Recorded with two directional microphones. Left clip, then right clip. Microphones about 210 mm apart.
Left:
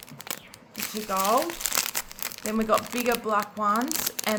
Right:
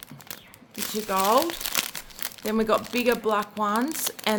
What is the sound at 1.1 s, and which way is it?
Speech, 35° right (ahead or behind).